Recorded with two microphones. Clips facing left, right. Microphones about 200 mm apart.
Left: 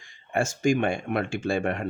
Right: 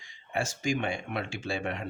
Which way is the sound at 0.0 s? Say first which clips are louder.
Left 6 dB; 50° left (ahead or behind).